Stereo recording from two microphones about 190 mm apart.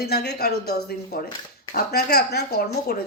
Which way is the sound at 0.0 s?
60° left (ahead or behind).